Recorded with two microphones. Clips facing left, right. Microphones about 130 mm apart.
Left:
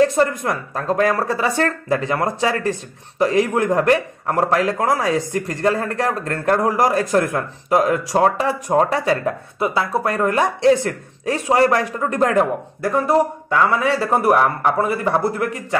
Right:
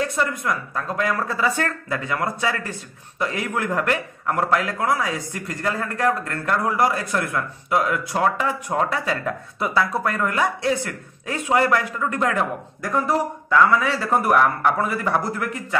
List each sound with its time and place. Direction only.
0.0 s a man's voice: 40° left (ahead or behind)
9.6 s a man's voice: 25° left (ahead or behind)